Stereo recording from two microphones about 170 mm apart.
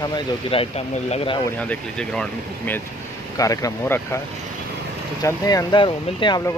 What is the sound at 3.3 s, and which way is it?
Speech, 20° left (ahead or behind).